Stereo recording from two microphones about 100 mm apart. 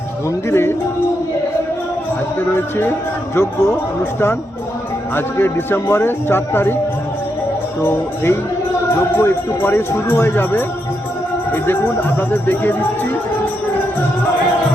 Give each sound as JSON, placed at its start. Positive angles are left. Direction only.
{"t": 0.3, "sound": "speech", "side_deg": 25}
{"t": 2.6, "sound": "speech", "side_deg": 20}
{"t": 5.1, "sound": "speech", "side_deg": 20}
{"t": 7.8, "sound": "speech", "side_deg": 25}